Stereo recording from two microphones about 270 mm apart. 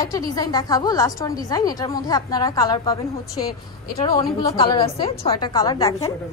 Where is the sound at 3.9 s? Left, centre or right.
Centre.